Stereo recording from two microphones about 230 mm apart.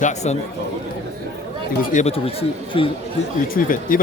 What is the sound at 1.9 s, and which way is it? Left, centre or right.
Speech, left.